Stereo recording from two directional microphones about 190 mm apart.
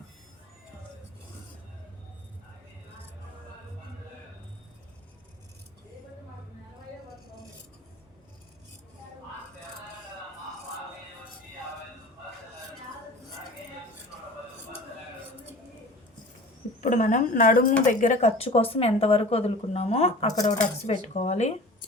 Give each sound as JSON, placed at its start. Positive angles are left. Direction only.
{"t": 16.8, "sound": "speech", "side_deg": 40}
{"t": 20.2, "sound": "speech", "side_deg": 20}
{"t": 20.5, "sound": "speech", "side_deg": 35}